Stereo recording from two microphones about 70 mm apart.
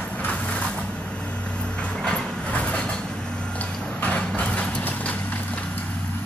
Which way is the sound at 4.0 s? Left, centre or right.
Centre.